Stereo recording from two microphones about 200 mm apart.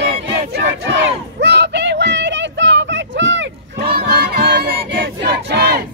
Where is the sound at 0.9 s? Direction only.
60° right (ahead or behind).